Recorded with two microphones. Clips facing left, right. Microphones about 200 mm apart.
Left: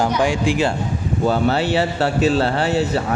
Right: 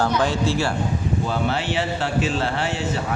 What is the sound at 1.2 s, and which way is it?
A man's voice, 40° left (ahead or behind).